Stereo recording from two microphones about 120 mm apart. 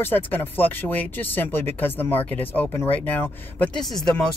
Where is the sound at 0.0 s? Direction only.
15° left (ahead or behind).